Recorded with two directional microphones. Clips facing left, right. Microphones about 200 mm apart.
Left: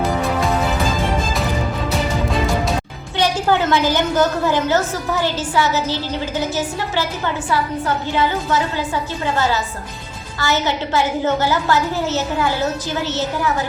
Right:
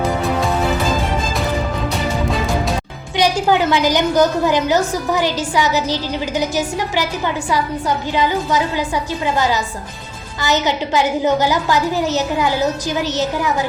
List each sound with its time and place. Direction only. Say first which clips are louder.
3.2 s a woman's voice: right 2 dB; 15° right (ahead or behind)